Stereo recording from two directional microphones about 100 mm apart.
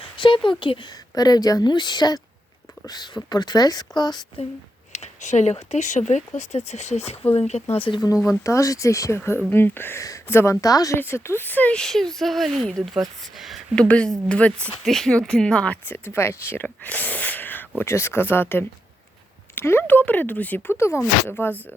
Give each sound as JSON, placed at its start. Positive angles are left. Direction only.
{"t": 0.0, "sound": "speech", "side_deg": 55}
{"t": 1.1, "sound": "speech", "side_deg": 40}
{"t": 5.7, "sound": "speech", "side_deg": 90}
{"t": 8.4, "sound": "speech", "side_deg": 35}
{"t": 10.9, "sound": "speech", "side_deg": 25}
{"t": 13.7, "sound": "speech", "side_deg": 10}
{"t": 16.6, "sound": "speech", "side_deg": 15}